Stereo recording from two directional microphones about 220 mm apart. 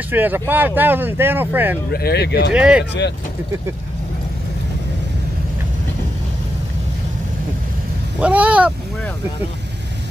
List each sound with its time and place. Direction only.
0.1 s speech: 10° right (ahead or behind)
1.9 s speech: 45° left (ahead or behind)
2.5 s speech: 5° right (ahead or behind)
8.2 s speech: 5° right (ahead or behind)